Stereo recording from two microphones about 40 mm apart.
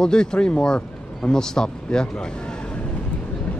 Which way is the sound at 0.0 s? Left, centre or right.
Centre.